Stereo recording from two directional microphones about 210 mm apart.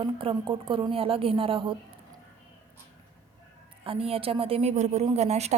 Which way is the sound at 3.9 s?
25° right (ahead or behind).